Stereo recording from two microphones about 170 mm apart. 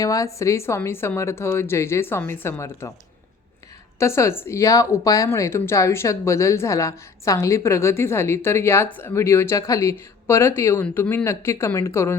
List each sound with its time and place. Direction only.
0.0 s a woman's voice: 20° left (ahead or behind)
4.0 s speech: 15° left (ahead or behind)